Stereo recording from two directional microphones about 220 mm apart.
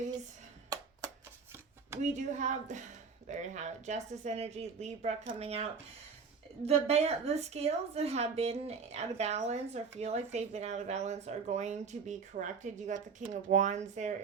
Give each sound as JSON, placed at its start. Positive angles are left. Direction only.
{"t": 0.7, "sound": "music", "side_deg": -15}
{"t": 2.0, "sound": "speech", "side_deg": -35}
{"t": 6.7, "sound": "speech", "side_deg": -30}